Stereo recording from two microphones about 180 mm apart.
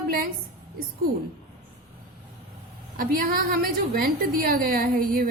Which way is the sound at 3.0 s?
50° right (ahead or behind).